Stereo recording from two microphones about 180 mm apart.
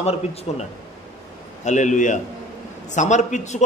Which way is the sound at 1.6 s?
45° left (ahead or behind).